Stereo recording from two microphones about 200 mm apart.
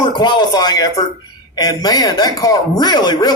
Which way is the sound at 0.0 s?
20° left (ahead or behind).